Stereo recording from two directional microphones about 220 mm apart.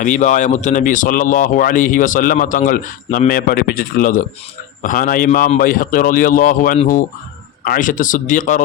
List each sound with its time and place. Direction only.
0.0 s speech: 35° left (ahead or behind)